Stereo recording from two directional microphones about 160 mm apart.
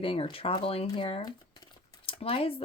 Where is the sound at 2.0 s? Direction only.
35° left (ahead or behind).